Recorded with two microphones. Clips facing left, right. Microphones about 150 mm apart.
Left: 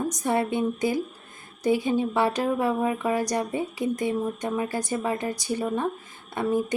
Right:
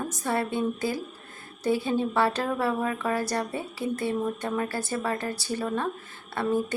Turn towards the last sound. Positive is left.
turn(degrees=15)  # may be behind; listen again after turning